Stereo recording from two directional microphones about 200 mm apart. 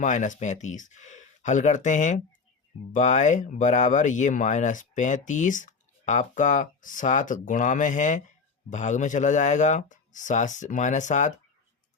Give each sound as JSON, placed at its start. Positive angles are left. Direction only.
{"t": 0.0, "sound": "speech", "side_deg": 40}